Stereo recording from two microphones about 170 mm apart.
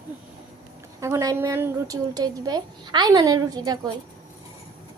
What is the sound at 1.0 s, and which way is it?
A woman's voice, 15° right (ahead or behind).